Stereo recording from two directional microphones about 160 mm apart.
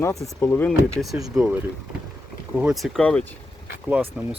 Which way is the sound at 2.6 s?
5° right (ahead or behind).